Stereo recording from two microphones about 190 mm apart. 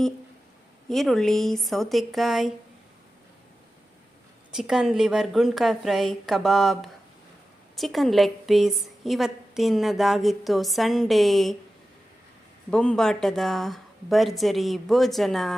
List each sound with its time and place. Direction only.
0.9 s a woman's voice: centre (ahead or behind)
4.5 s a woman's voice: 5° right (ahead or behind)
12.7 s a woman's voice: 5° left (ahead or behind)